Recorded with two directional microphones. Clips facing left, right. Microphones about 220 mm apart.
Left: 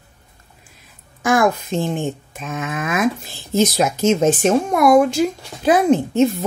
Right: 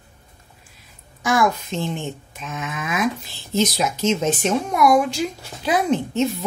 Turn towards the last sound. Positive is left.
turn(degrees=50)  # may be behind; listen again after turning